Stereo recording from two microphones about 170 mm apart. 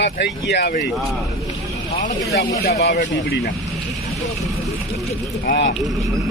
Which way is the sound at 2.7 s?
75° left (ahead or behind).